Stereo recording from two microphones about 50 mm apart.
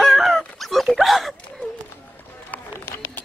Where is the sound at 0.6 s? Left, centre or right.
Centre.